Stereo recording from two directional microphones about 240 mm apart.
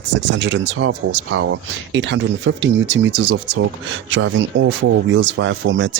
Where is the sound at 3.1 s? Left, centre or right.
Right.